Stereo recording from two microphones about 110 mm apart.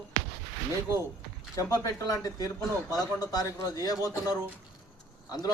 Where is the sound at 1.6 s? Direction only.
30° left (ahead or behind).